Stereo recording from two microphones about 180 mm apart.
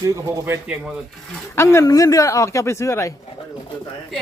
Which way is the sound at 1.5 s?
15° left (ahead or behind).